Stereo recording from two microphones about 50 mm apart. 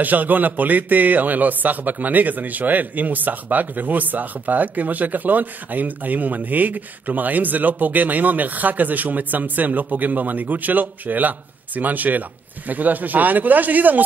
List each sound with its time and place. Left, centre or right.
0.0 s a man's voice: right